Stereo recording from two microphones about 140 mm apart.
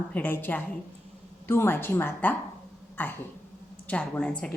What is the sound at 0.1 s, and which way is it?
A woman's voice, 15° left (ahead or behind).